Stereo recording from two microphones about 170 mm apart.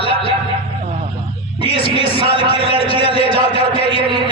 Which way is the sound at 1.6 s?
35° left (ahead or behind).